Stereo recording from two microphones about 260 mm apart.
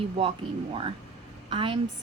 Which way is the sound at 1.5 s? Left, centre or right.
Centre.